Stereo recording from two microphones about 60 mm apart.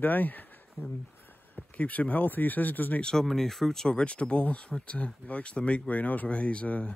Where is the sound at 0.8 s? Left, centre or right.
Left.